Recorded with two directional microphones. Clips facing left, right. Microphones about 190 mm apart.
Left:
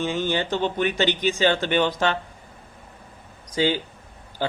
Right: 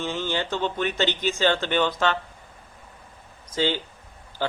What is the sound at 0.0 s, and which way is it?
Speech, 15° left (ahead or behind).